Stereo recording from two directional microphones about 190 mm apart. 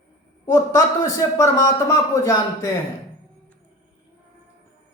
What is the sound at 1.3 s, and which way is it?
A man's voice, 15° left (ahead or behind).